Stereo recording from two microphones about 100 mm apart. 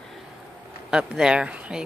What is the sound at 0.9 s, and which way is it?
Speech, 10° right (ahead or behind).